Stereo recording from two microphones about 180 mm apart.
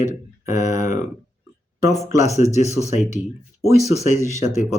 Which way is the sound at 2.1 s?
40° left (ahead or behind).